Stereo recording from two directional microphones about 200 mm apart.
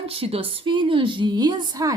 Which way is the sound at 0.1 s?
30° right (ahead or behind).